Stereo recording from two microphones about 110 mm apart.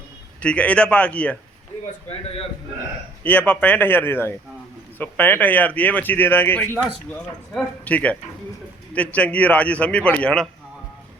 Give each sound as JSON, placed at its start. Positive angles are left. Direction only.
{"t": 0.4, "sound": "speech", "side_deg": 10}
{"t": 3.2, "sound": "speech", "side_deg": 15}